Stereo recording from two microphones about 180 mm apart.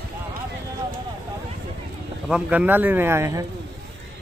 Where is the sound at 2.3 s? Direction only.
5° right (ahead or behind).